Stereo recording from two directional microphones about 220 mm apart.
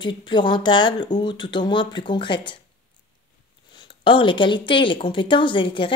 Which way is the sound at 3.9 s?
25° left (ahead or behind).